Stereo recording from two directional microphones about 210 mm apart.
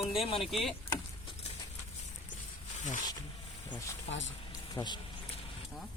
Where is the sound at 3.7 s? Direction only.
15° left (ahead or behind).